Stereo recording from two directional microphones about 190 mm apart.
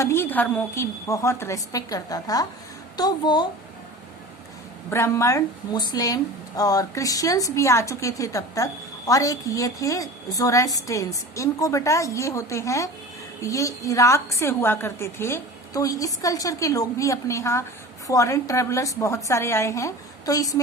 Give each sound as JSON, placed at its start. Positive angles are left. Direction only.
{"t": 0.0, "sound": "a woman's voice", "side_deg": 10}
{"t": 4.9, "sound": "a woman's voice", "side_deg": 15}